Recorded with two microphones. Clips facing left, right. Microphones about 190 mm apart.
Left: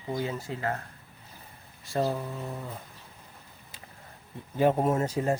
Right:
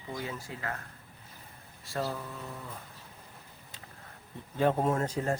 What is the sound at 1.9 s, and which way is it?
Speech, 25° left (ahead or behind).